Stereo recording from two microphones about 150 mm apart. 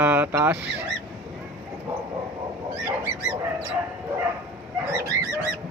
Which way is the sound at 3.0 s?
10° right (ahead or behind).